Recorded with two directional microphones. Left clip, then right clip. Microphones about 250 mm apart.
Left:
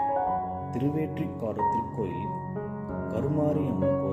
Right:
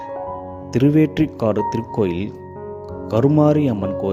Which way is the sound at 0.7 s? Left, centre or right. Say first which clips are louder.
Right 13 dB; right.